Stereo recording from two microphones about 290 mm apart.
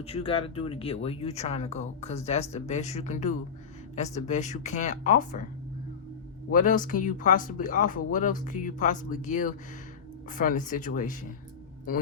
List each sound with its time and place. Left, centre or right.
0.0 s speech: centre
6.5 s speech: left